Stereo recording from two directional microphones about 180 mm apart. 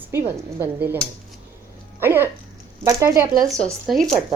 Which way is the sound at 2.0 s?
15° right (ahead or behind).